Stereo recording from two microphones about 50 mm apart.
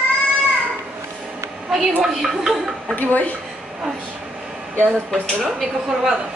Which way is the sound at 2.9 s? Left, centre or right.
Left.